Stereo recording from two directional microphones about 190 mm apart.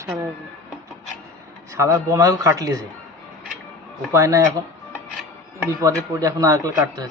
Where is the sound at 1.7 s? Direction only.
15° right (ahead or behind).